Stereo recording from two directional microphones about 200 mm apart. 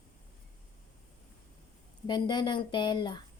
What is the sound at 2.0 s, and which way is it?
Speech, 20° left (ahead or behind).